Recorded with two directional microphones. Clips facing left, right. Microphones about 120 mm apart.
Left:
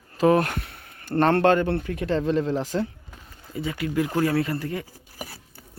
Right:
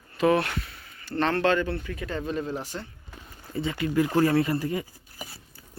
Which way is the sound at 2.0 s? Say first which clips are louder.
Left 7 dB; 85° left.